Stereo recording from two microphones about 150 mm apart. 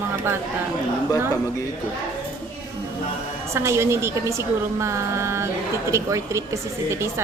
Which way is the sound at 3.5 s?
20° right (ahead or behind).